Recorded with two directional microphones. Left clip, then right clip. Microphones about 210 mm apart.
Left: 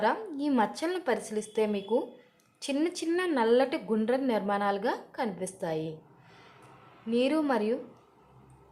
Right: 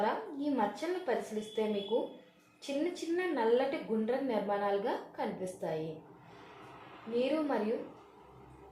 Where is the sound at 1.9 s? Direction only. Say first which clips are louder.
Left 4 dB; 55° left (ahead or behind).